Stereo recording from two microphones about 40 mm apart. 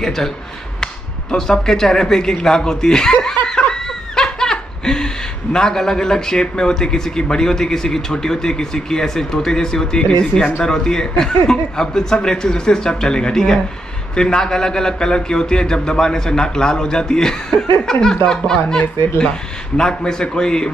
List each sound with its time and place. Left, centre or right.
0.0 s speech: centre
1.3 s speech: centre
3.4 s snicker: centre
10.6 s a man's voice: centre